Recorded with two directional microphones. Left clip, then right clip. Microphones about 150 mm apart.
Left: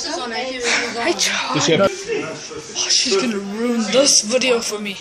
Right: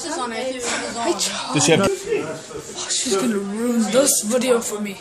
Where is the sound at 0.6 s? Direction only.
20° right (ahead or behind).